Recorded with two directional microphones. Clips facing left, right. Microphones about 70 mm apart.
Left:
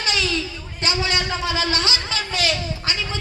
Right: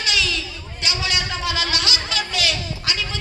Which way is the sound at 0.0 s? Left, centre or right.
Left.